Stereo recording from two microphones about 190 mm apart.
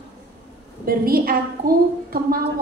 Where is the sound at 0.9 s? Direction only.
50° right (ahead or behind).